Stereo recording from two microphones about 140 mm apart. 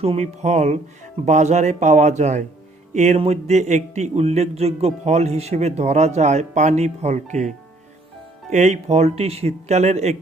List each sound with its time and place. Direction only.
0.0 s a man's voice: 50° right (ahead or behind)